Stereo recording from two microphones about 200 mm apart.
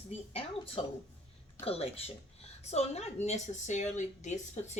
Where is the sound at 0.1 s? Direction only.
25° left (ahead or behind).